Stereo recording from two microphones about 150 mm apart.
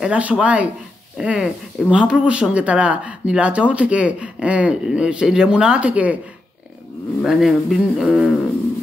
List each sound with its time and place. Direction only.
0.0 s speech: 10° right (ahead or behind)
7.2 s speech: centre (ahead or behind)